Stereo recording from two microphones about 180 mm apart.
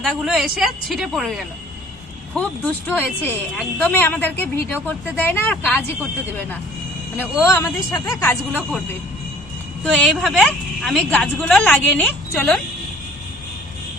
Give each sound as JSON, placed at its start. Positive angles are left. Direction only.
{"t": 0.1, "sound": "a woman's voice", "side_deg": -5}
{"t": 7.2, "sound": "speech", "side_deg": 15}
{"t": 10.0, "sound": "a woman's voice", "side_deg": 0}